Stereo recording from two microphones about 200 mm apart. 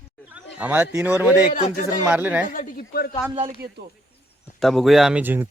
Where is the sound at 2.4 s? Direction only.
40° left (ahead or behind).